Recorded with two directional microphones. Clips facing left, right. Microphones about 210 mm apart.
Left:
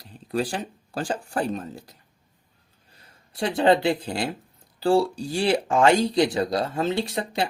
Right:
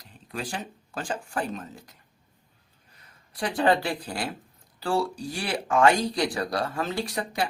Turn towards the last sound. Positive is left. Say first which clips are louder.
# left 3 dB
turn(degrees=25)  # may be behind; listen again after turning